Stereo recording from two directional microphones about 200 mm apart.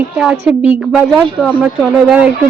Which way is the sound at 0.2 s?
5° right (ahead or behind).